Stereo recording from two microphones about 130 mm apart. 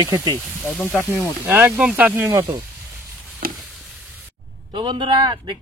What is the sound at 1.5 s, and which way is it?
Speech, 15° right (ahead or behind).